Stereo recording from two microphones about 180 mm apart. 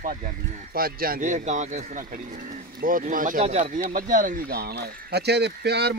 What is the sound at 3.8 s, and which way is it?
Speech, 50° right (ahead or behind).